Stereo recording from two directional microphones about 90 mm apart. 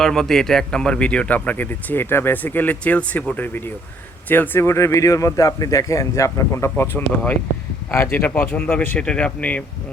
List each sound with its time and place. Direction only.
0.0 s a man's voice: 5° left (ahead or behind); by 9.0 s 20° left (ahead or behind)
9.0 s speech: 10° left (ahead or behind)